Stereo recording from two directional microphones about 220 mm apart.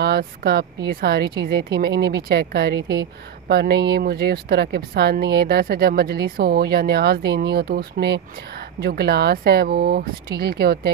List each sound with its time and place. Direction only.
0.0 s speech: 45° right (ahead or behind)